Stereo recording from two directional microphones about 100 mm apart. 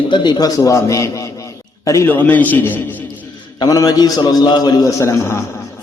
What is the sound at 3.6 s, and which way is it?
A man's voice, 40° left (ahead or behind).